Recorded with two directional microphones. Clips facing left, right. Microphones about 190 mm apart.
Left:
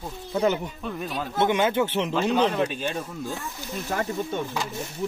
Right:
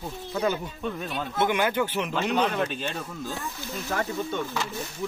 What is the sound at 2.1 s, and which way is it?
Speech, 10° left (ahead or behind).